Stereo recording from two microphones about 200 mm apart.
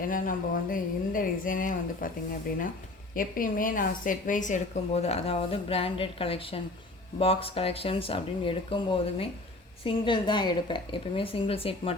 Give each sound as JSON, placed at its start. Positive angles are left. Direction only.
{"t": 0.0, "sound": "speech", "side_deg": 45}
{"t": 3.2, "sound": "a woman's voice", "side_deg": 45}